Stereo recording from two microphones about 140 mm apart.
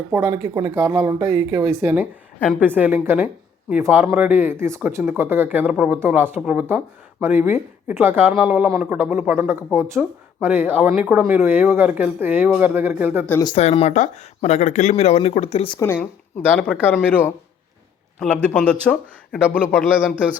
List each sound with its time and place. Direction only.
0.1 s speech: 15° right (ahead or behind)
13.6 s speech: 50° left (ahead or behind)
15.8 s a man's voice: 15° left (ahead or behind)
18.2 s a man's voice: 5° left (ahead or behind)